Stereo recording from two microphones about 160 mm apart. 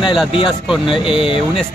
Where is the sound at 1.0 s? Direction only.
35° left (ahead or behind).